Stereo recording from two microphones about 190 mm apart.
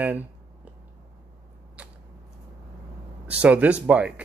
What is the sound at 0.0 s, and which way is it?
Speech, 10° right (ahead or behind).